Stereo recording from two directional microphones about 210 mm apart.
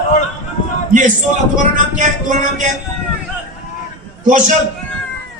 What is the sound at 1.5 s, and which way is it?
A man's voice, 35° right (ahead or behind).